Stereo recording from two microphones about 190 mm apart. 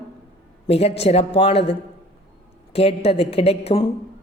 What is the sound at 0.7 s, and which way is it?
A woman's voice, 30° left (ahead or behind).